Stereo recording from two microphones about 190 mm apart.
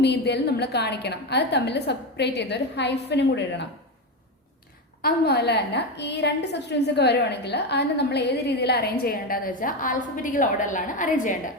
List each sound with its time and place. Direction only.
0.0 s a woman's voice: 60° left (ahead or behind)
5.0 s a woman's voice: 60° left (ahead or behind); by 11.3 s 40° left (ahead or behind)